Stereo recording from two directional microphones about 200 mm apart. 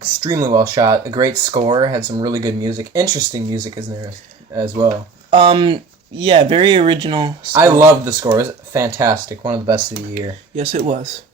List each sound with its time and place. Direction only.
0.2 s speech: 20° right (ahead or behind)
9.9 s speech: 35° right (ahead or behind)